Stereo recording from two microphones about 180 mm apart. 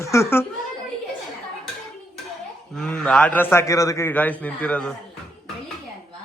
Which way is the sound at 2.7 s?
5° left (ahead or behind).